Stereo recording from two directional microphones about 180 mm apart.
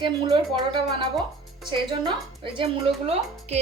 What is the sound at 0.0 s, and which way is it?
Speech, 25° right (ahead or behind).